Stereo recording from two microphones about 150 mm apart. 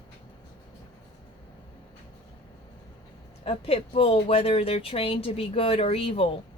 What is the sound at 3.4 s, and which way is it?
Speech, 40° left (ahead or behind).